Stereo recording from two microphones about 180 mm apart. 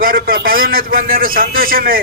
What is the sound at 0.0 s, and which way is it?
A man's voice, 55° right (ahead or behind).